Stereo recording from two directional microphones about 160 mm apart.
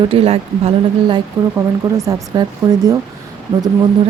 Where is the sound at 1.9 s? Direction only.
20° right (ahead or behind).